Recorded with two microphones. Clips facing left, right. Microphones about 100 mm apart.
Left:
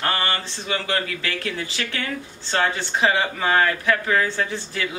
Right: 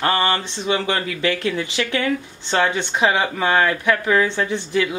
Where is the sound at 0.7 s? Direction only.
20° right (ahead or behind).